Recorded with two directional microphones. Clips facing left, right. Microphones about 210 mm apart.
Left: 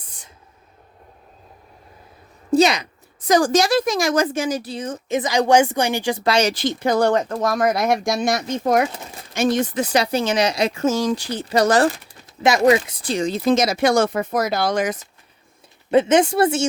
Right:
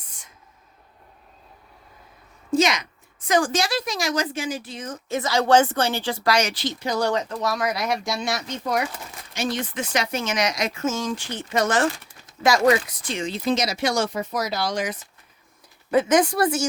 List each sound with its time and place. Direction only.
2.6 s speech: 35° left (ahead or behind)
5.0 s speech: 15° left (ahead or behind)
6.5 s speech: 50° left (ahead or behind)
8.9 s a sound: 25° left (ahead or behind)
9.3 s speech: 50° left (ahead or behind)
12.4 s speech: 20° left (ahead or behind); by 14.9 s 55° left (ahead or behind)
15.9 s speech: 25° left (ahead or behind)